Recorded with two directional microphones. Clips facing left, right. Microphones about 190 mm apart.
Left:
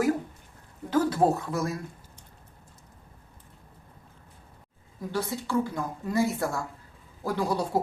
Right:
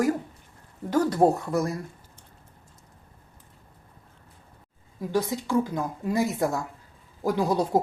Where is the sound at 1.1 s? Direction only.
15° right (ahead or behind).